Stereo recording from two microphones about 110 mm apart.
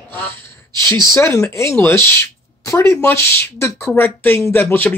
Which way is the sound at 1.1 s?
25° left (ahead or behind).